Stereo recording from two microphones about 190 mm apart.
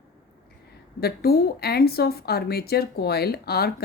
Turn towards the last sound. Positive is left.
turn(degrees=55)  # may be behind; listen again after turning